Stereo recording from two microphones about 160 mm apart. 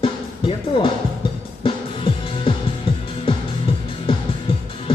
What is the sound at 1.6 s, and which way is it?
Music, 35° left (ahead or behind).